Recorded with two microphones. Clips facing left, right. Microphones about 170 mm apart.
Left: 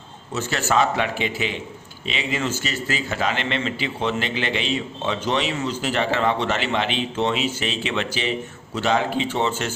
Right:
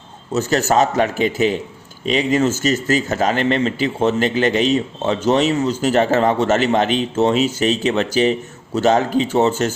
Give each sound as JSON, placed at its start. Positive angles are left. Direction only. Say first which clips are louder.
{"t": 0.3, "sound": "a man's voice", "louder": "right 6 dB", "side_deg": -40}